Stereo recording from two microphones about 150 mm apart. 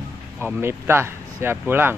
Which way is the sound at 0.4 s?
15° right (ahead or behind).